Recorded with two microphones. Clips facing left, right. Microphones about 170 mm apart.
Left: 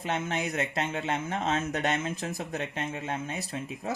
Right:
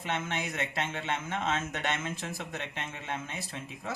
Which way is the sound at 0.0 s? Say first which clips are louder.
Left 3 dB; 40° left (ahead or behind).